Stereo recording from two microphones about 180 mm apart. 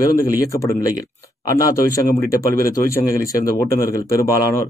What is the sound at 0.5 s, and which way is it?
Speech, 15° left (ahead or behind).